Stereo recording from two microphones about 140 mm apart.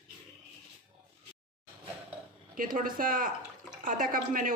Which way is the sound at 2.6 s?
80° right.